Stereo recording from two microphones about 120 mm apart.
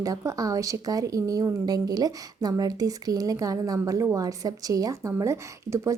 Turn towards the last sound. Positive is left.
turn(degrees=-25)  # may be behind; listen again after turning